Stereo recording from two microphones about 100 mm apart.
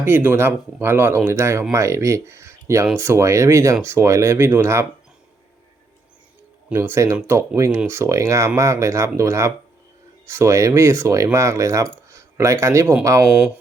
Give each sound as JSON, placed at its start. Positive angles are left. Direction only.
{"t": 0.0, "sound": "speech", "side_deg": -20}
{"t": 6.7, "sound": "speech", "side_deg": -25}